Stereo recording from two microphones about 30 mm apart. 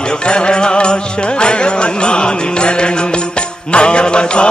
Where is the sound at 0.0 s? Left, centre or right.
Left.